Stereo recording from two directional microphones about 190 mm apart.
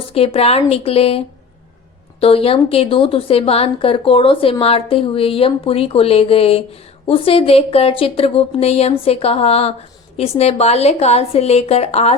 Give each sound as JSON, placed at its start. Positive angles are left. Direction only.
{"t": 0.1, "sound": "a woman's voice", "side_deg": 30}
{"t": 2.2, "sound": "a woman's voice", "side_deg": 30}